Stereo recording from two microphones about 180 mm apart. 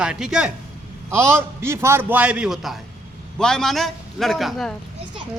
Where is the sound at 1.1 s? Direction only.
15° right (ahead or behind).